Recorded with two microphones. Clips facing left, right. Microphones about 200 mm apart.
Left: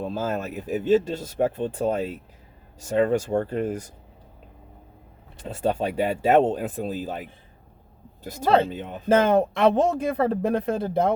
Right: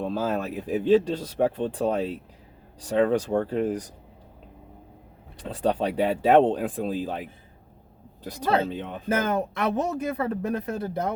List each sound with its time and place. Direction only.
0.0 s speech: centre (ahead or behind)
5.8 s speech: centre (ahead or behind)
8.7 s speech: 5° left (ahead or behind)
9.0 s speech: 30° left (ahead or behind)